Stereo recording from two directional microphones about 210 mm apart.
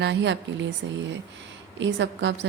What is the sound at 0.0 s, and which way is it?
Speech, 55° right (ahead or behind).